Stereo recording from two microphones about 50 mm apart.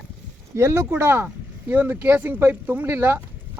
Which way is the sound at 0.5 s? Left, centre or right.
Right.